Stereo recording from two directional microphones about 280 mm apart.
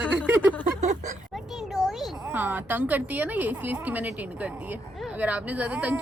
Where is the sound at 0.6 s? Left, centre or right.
Right.